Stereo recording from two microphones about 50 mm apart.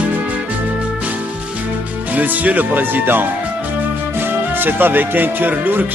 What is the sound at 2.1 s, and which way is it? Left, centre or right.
Speech, right.